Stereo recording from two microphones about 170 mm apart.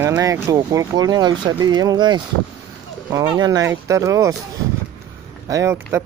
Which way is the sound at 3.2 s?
20° right (ahead or behind).